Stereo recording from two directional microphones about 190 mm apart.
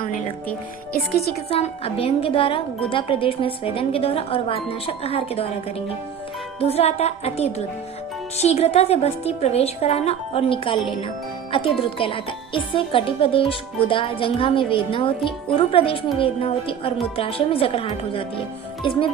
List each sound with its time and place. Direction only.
1.5 s speech: 30° left (ahead or behind)
6.6 s a woman's voice: 30° left (ahead or behind)